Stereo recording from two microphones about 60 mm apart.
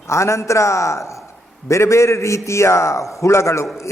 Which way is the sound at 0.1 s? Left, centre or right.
Left.